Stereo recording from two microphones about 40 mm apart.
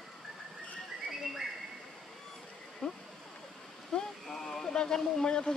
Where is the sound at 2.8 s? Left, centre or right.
Centre.